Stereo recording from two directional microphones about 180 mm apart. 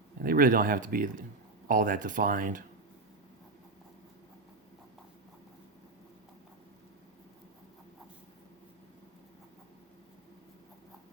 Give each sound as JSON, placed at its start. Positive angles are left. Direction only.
{"t": 0.2, "sound": "speech", "side_deg": -50}